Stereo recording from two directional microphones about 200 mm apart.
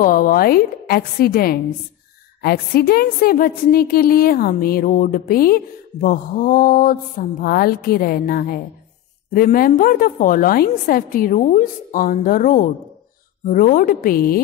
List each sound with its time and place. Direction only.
0.0 s speech: 45° left (ahead or behind)